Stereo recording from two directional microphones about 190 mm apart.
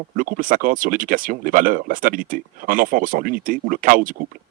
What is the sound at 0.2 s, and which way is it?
Speech, 45° right (ahead or behind).